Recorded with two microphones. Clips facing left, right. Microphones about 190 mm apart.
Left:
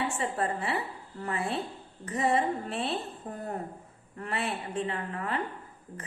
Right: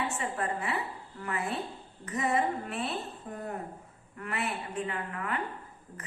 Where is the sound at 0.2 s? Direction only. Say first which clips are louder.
Left 2 dB; 30° left (ahead or behind).